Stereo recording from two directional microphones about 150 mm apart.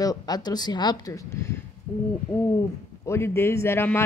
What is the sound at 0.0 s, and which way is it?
Speech, 25° left (ahead or behind).